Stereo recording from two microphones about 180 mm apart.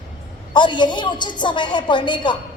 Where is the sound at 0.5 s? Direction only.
25° left (ahead or behind).